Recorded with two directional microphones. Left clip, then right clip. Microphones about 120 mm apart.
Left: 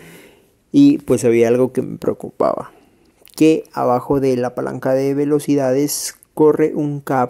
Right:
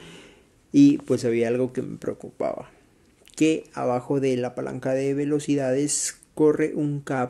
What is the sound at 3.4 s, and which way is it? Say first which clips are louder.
Speech: left 9 dB; 50° left (ahead or behind).